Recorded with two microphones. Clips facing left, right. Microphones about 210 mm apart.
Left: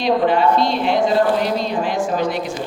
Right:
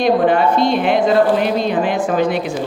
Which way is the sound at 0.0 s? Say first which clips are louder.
Right 2 dB; 50° right (ahead or behind).